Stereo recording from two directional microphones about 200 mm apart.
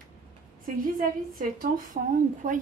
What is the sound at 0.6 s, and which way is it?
A woman's voice, 45° right (ahead or behind).